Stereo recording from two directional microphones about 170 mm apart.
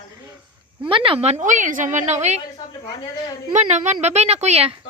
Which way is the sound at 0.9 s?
30° right (ahead or behind).